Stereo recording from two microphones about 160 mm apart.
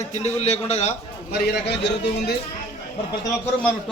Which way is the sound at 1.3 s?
85° left.